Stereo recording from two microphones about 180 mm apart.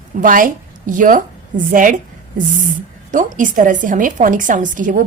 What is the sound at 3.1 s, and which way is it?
A woman's voice, 45° right (ahead or behind).